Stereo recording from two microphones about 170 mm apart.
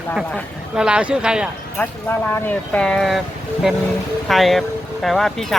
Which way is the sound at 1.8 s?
10° left (ahead or behind).